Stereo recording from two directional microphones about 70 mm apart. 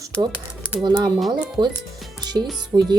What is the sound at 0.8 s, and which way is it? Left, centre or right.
Speech, right.